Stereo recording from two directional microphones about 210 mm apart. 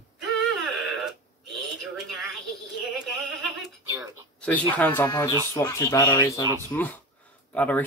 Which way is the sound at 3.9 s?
5° left (ahead or behind).